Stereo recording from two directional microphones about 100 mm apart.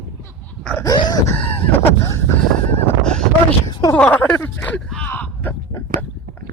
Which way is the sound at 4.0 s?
15° left (ahead or behind).